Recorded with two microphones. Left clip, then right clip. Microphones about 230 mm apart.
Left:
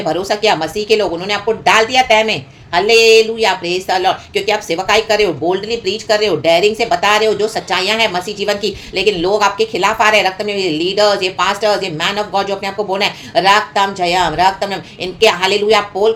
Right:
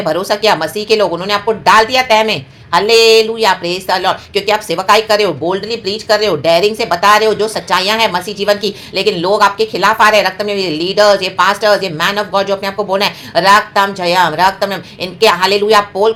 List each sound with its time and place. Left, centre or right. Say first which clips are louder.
0.0 s speech: right 2 dB; centre